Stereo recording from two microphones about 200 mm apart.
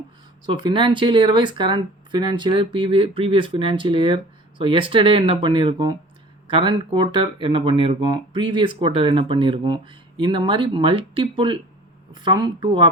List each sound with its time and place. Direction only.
0.4 s speech: 20° right (ahead or behind)